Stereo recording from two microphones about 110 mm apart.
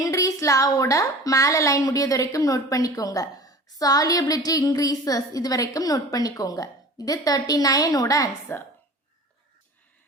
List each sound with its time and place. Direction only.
0.0 s a woman's voice: 30° left (ahead or behind)
8.5 s a woman's voice: 20° left (ahead or behind)